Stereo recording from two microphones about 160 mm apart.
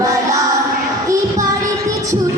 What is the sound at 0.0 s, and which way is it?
Music, 20° right (ahead or behind).